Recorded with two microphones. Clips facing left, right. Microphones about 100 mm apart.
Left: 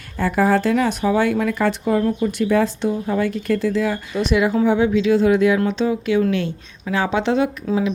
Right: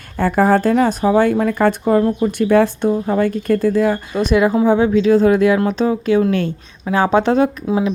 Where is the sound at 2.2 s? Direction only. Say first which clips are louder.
Right 4 dB; 55° right (ahead or behind).